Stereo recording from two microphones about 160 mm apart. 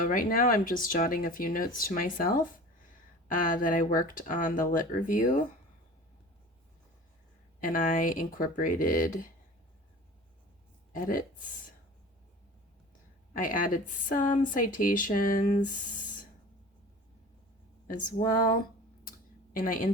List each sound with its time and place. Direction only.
0.0 s speech: 60° left (ahead or behind)
7.6 s speech: 55° left (ahead or behind)
10.9 s speech: 60° left (ahead or behind)
13.3 s speech: 55° left (ahead or behind)
17.8 s speech: 55° left (ahead or behind)
19.5 s speech: 60° left (ahead or behind)